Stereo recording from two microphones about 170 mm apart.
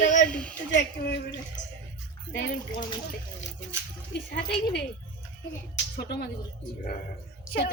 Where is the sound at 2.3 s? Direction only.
60° left (ahead or behind).